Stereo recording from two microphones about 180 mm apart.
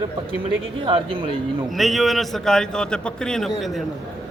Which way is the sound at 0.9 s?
25° right (ahead or behind).